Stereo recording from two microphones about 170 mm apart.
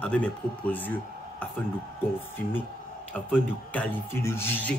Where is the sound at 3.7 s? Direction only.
10° left (ahead or behind).